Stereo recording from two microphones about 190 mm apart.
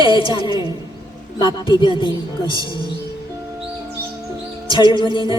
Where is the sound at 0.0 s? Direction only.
25° left (ahead or behind).